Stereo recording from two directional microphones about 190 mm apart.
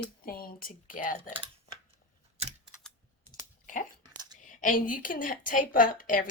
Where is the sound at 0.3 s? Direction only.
50° left (ahead or behind).